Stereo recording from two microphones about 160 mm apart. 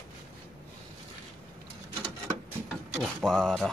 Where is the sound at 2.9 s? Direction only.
5° left (ahead or behind).